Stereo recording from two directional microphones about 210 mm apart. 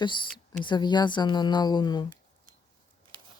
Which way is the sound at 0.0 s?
20° left (ahead or behind).